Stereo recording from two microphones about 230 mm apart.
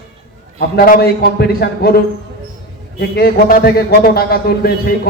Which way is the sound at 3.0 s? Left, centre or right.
Left.